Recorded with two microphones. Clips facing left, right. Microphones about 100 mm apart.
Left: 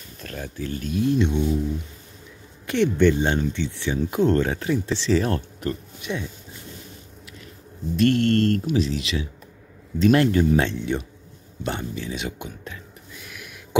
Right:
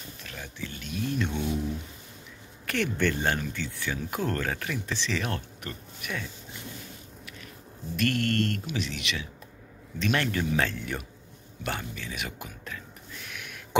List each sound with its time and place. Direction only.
0.2 s speech: 45° left (ahead or behind); by 1.3 s 30° left (ahead or behind)
2.6 s speech: 20° left (ahead or behind)
7.9 s speech: 30° left (ahead or behind)
13.2 s a sound: 5° left (ahead or behind)